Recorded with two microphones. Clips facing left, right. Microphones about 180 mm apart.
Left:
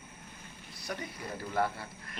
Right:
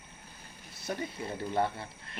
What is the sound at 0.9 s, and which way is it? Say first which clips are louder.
Speech: right 3 dB; 25° right (ahead or behind).